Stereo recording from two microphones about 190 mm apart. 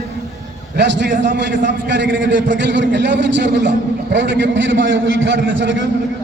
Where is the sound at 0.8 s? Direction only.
65° right (ahead or behind).